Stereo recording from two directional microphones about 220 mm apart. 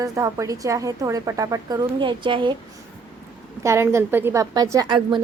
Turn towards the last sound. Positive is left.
turn(degrees=-20)  # may be behind; listen again after turning